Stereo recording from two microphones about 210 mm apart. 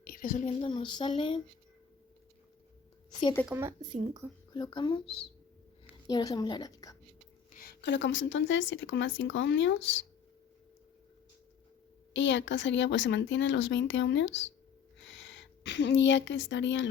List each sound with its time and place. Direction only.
0.1 s a woman's voice: 40° left (ahead or behind)
0.6 s speech: 20° left (ahead or behind)
3.4 s speech: 10° right (ahead or behind)
4.5 s a woman's voice: 20° left (ahead or behind)
7.5 s speech: 45° left (ahead or behind)
12.1 s a woman's voice: 60° left (ahead or behind)